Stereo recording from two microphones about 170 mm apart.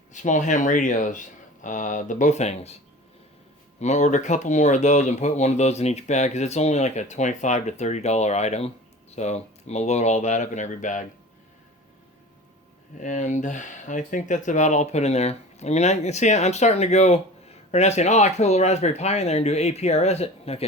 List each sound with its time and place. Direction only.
0.1 s speech: 45° left (ahead or behind)
3.8 s speech: 45° left (ahead or behind)
13.0 s speech: 45° left (ahead or behind)